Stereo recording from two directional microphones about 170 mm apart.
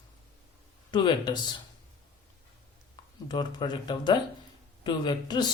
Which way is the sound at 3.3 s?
25° left (ahead or behind).